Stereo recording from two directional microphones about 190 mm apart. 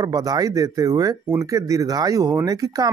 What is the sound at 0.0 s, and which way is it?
Speech, 20° right (ahead or behind).